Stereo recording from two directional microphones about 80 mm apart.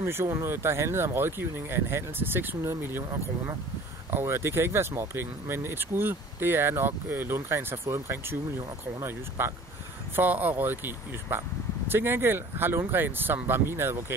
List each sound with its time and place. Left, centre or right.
0.0 s speech: right
9.4 s speech: right